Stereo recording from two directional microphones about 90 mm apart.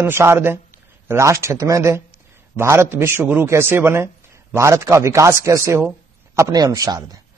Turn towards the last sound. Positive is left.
turn(degrees=-45)  # may be behind; listen again after turning